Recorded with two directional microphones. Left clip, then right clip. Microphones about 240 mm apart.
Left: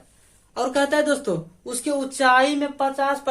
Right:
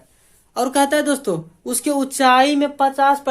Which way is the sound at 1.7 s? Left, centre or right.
Right.